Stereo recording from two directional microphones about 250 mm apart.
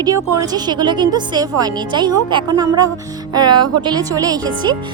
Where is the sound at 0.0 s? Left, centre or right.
Centre.